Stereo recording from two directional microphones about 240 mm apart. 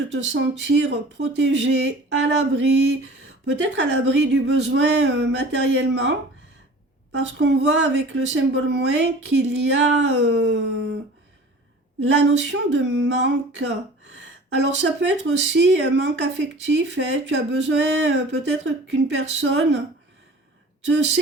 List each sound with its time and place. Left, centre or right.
0.1 s speech: right
7.3 s speech: right
11.9 s speech: right
20.8 s speech: right